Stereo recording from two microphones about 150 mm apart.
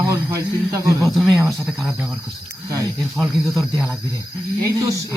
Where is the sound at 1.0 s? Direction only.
Centre (ahead or behind).